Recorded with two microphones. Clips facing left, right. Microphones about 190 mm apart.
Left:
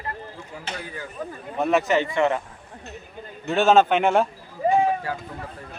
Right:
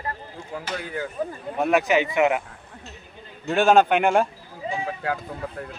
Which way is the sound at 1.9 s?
10° right (ahead or behind).